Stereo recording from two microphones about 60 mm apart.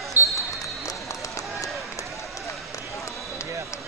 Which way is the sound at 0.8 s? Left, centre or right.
Left.